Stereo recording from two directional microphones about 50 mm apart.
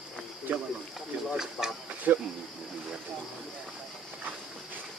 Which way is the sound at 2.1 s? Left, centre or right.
Right.